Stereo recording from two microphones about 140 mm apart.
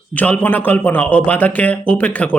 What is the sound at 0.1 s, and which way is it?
A man's voice, 10° left (ahead or behind).